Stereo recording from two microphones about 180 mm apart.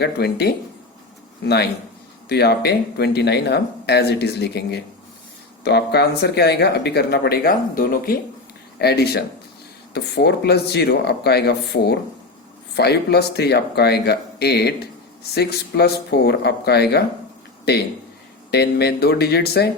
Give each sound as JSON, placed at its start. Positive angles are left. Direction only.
{"t": 0.0, "sound": "speech", "side_deg": 65}